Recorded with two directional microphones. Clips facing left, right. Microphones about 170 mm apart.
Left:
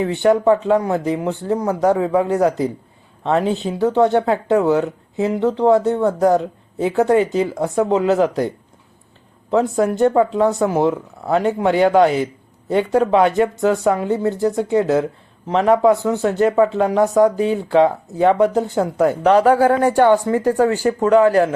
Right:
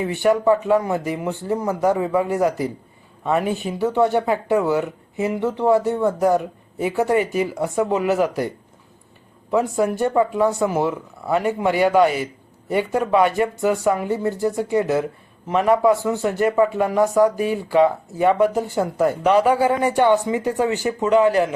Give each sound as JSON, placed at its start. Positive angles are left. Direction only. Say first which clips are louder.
{"t": 0.1, "sound": "speech", "louder": "left 2 dB", "side_deg": 20}
{"t": 19.2, "sound": "speech", "louder": "left 4 dB", "side_deg": -10}